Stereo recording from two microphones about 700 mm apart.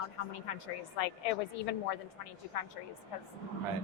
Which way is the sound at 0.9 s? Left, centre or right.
Left.